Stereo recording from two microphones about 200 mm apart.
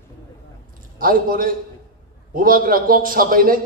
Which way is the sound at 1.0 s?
45° right (ahead or behind).